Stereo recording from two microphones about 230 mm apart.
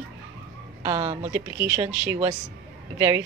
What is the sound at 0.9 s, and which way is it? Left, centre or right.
Speech, right.